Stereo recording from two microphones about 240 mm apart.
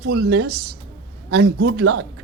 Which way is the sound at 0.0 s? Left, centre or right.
Right.